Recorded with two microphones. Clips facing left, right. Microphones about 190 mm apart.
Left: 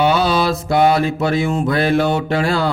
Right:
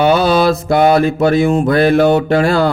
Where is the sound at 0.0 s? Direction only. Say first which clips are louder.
Right 4 dB; 50° right (ahead or behind).